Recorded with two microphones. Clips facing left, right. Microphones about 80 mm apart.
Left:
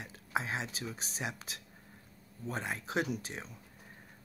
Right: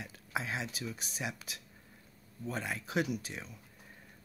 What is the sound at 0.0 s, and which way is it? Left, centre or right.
Speech, left.